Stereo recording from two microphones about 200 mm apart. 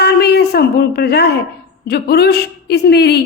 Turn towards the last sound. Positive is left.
turn(degrees=55)  # may be behind; listen again after turning